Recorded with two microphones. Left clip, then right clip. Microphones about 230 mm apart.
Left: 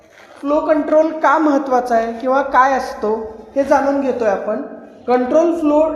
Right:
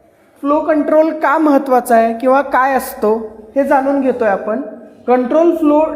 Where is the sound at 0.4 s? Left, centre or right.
Right.